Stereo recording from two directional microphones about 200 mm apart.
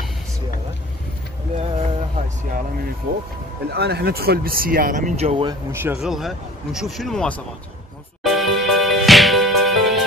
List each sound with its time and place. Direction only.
1.6 s a sound: 30° right (ahead or behind)
3.7 s speech: 55° right (ahead or behind); by 5.5 s 30° right (ahead or behind)
5.5 s a man's voice: 10° right (ahead or behind); by 7.4 s 5° left (ahead or behind)
8.2 s music: centre (ahead or behind)